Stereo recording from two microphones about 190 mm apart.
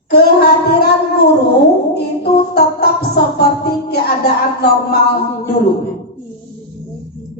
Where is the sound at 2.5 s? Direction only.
55° left (ahead or behind).